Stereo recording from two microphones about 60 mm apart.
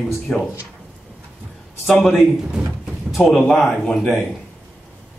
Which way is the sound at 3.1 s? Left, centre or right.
Centre.